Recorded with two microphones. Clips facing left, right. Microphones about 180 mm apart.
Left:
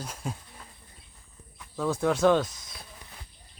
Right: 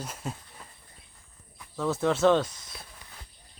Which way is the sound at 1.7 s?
Centre (ahead or behind).